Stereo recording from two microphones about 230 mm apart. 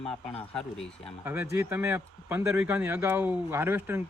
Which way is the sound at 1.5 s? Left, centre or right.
Centre.